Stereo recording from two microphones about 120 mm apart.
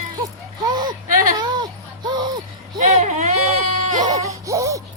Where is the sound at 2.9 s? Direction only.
75° right (ahead or behind).